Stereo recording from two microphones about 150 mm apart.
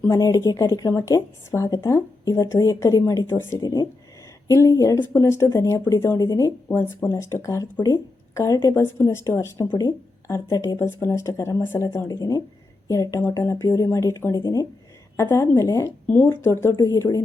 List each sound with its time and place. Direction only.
0.0 s a woman's voice: 20° left (ahead or behind)
3.6 s a woman's voice: 25° left (ahead or behind)